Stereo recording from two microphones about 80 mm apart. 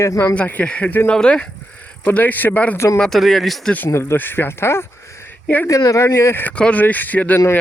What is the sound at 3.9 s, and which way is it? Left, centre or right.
Speech, left.